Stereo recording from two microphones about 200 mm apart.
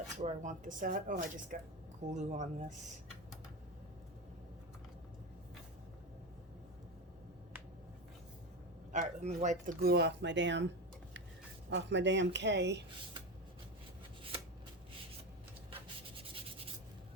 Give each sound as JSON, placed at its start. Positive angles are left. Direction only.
{"t": 0.2, "sound": "speech", "side_deg": -35}
{"t": 8.9, "sound": "speech", "side_deg": -35}
{"t": 11.7, "sound": "speech", "side_deg": -60}